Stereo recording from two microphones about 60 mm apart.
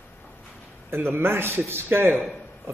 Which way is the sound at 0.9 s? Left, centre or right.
Right.